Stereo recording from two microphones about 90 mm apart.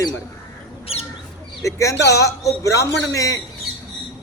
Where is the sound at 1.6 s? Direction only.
35° left (ahead or behind).